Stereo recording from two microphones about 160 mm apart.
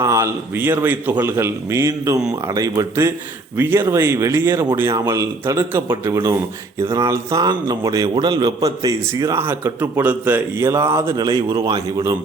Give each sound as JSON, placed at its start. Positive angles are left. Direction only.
{"t": 0.0, "sound": "a man's voice", "side_deg": -20}